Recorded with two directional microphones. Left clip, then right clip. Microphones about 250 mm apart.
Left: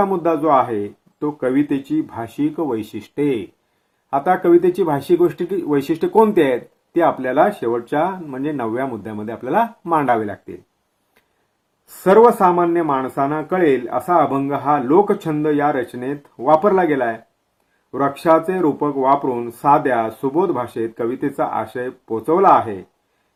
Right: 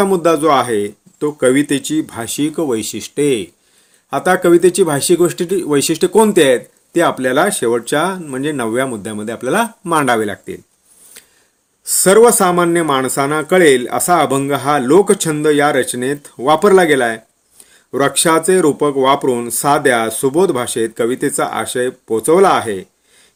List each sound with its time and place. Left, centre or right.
0.0 s speech: right
12.0 s speech: right